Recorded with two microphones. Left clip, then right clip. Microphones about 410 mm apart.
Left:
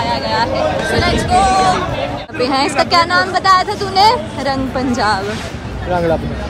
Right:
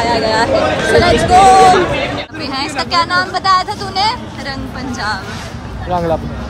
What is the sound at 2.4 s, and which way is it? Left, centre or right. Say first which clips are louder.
A woman's voice: left 7 dB; centre.